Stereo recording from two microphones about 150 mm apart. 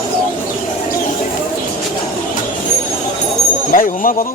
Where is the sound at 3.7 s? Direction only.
70° left (ahead or behind).